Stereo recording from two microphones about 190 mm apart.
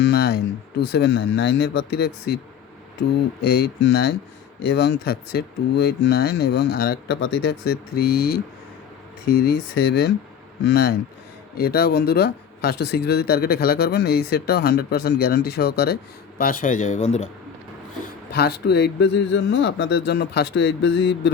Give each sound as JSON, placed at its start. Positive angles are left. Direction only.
{"t": 0.0, "sound": "speech", "side_deg": 60}
{"t": 3.4, "sound": "speech", "side_deg": 55}
{"t": 16.4, "sound": "speech", "side_deg": 45}
{"t": 18.3, "sound": "speech", "side_deg": 60}